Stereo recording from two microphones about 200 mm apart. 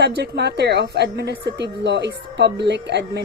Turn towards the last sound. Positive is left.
turn(degrees=-60)  # may be behind; listen again after turning